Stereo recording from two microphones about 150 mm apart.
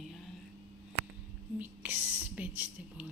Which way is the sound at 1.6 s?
10° right (ahead or behind).